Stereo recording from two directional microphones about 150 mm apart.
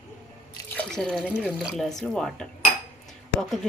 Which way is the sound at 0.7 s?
5° left (ahead or behind).